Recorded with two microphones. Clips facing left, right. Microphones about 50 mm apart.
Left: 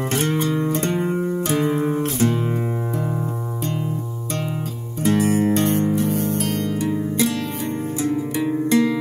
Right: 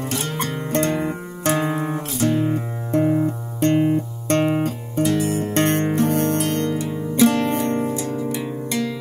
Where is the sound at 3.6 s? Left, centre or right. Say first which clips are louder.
Right 12 dB; right.